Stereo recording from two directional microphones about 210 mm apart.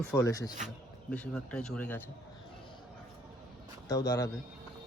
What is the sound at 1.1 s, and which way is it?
Speech, 5° left (ahead or behind).